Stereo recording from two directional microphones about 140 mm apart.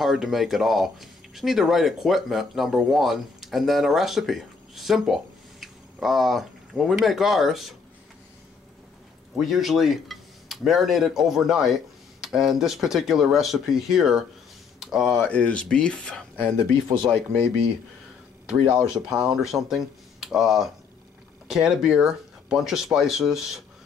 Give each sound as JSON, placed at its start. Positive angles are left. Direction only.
{"t": 0.0, "sound": "speech", "side_deg": 0}
{"t": 9.4, "sound": "speech", "side_deg": 0}
{"t": 15.2, "sound": "speech", "side_deg": 10}
{"t": 18.7, "sound": "speech", "side_deg": -5}